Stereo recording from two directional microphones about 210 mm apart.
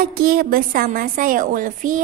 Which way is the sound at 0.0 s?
45° right (ahead or behind).